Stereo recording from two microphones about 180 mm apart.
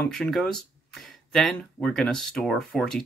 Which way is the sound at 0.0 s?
5° left (ahead or behind).